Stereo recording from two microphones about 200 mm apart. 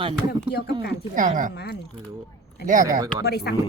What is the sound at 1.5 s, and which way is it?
Speech, 55° left (ahead or behind).